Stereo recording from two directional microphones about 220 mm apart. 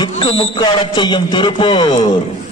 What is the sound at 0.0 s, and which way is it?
A man's voice, 25° left (ahead or behind).